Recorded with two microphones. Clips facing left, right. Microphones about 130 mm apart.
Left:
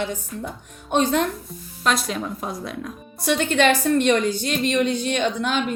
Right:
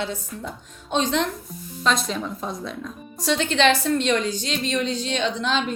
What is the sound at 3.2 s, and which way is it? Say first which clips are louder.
A woman's voice: left 1 dB; 50° left (ahead or behind).